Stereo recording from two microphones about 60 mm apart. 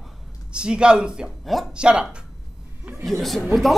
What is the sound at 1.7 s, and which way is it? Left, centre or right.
Speech, centre.